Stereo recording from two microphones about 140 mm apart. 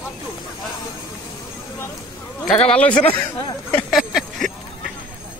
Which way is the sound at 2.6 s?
10° left (ahead or behind).